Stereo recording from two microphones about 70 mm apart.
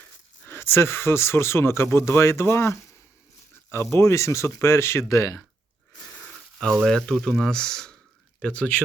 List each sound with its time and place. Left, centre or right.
0.4 s speech: left
3.9 s speech: left
6.8 s speech: centre